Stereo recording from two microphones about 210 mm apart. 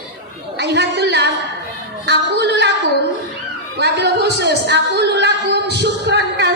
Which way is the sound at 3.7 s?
55° right (ahead or behind).